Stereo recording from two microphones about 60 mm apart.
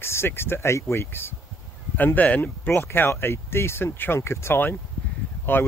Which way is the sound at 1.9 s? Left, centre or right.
Left.